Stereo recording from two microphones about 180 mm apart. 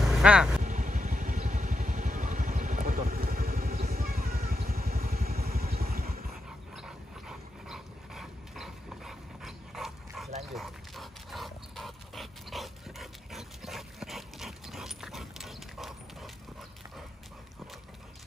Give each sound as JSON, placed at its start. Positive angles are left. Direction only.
{"t": 0.0, "sound": "vehicle", "side_deg": -5}
{"t": 0.7, "sound": "vehicle", "side_deg": -45}
{"t": 6.7, "sound": "dog", "side_deg": -5}